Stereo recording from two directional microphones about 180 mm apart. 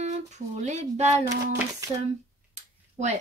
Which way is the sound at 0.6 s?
40° right (ahead or behind).